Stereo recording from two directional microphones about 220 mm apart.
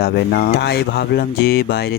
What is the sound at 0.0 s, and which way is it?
Speech, 45° left (ahead or behind).